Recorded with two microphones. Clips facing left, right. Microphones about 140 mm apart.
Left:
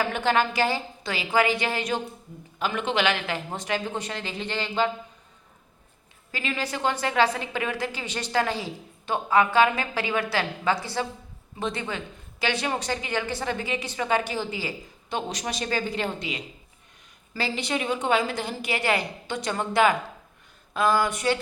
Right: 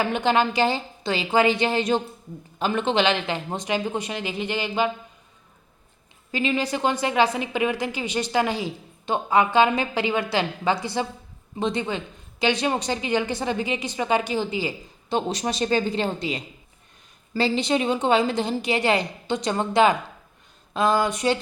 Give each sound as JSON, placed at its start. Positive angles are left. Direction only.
{"t": 0.0, "sound": "a woman's voice", "side_deg": -20}
{"t": 6.3, "sound": "a woman's voice", "side_deg": -20}
{"t": 15.1, "sound": "a woman's voice", "side_deg": -30}